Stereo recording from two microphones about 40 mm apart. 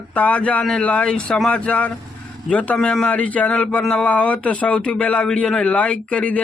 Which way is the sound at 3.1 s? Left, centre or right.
Left.